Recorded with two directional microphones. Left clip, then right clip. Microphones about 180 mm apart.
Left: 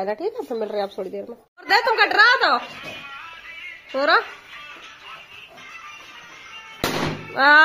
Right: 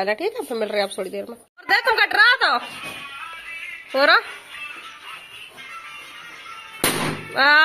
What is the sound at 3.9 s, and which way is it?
Speech, 5° left (ahead or behind).